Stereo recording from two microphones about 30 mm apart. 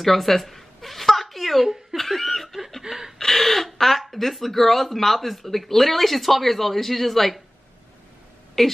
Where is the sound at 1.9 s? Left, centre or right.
Centre.